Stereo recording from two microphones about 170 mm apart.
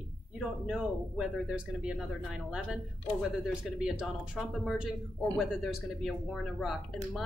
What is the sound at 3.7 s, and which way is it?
Speech, 5° right (ahead or behind).